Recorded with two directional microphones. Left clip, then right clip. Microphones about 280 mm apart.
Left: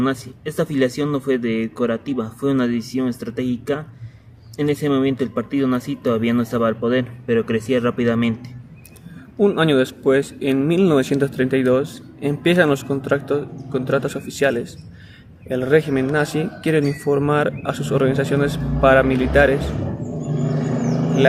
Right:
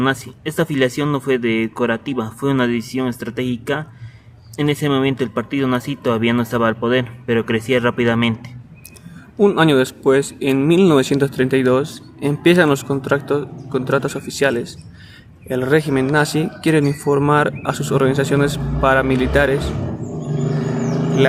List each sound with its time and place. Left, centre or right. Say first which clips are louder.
0.0 s speech: right 3 dB; right
9.4 s speech: right 3 dB; right